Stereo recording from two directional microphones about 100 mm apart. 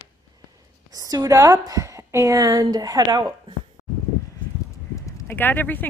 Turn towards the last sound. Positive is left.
turn(degrees=20)  # may be behind; listen again after turning